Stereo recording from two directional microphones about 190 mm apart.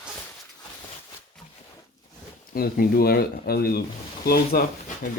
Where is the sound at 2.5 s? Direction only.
50° left (ahead or behind).